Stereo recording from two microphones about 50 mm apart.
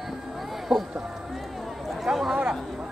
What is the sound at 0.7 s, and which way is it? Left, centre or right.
Run, centre.